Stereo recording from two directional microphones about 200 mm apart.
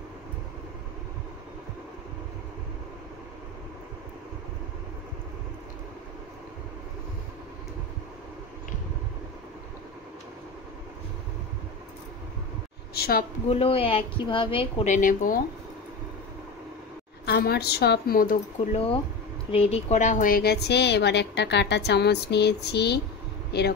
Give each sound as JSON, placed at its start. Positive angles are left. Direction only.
{"t": 12.9, "sound": "a woman's voice", "side_deg": 50}
{"t": 13.5, "sound": "speech", "side_deg": 30}
{"t": 17.3, "sound": "a woman's voice", "side_deg": 55}
{"t": 19.5, "sound": "a woman's voice", "side_deg": 30}